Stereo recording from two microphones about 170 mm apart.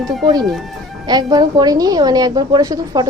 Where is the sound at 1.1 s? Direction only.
25° right (ahead or behind).